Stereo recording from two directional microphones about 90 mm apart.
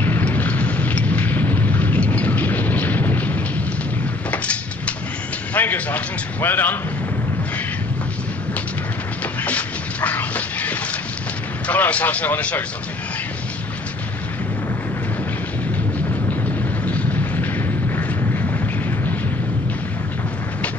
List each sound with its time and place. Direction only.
0.0 s a sound: 20° left (ahead or behind)
4.3 s vehicle: 15° left (ahead or behind)
5.5 s a man's voice: 20° left (ahead or behind)
9.4 s music: 15° left (ahead or behind)
11.6 s speech: 15° left (ahead or behind)
16.8 s a sound: 15° left (ahead or behind)